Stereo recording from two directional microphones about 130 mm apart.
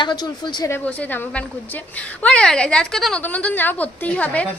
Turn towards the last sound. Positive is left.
turn(degrees=10)  # may be behind; listen again after turning